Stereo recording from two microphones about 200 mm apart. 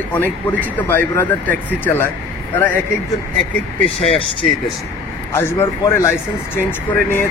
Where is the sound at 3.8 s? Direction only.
30° left (ahead or behind).